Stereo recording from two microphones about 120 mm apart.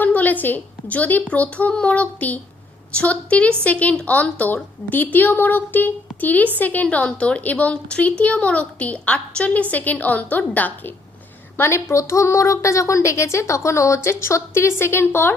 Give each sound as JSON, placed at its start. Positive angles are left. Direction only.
{"t": 0.0, "sound": "a woman's voice", "side_deg": 15}